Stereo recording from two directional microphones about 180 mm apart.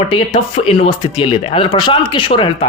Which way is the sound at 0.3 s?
35° left (ahead or behind).